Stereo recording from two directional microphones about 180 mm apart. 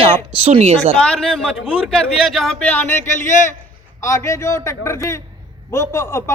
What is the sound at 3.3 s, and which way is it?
Speech, 45° left (ahead or behind).